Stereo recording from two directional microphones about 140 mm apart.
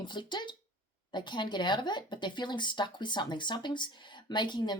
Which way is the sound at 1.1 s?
35° left (ahead or behind).